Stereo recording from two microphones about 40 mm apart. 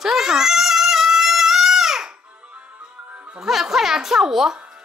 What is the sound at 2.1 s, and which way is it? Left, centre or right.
Music, right.